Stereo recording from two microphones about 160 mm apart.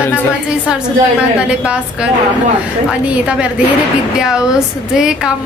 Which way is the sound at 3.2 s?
5° right (ahead or behind).